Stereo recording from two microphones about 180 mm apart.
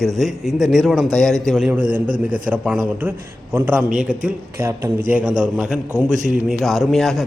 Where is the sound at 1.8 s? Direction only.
50° right (ahead or behind).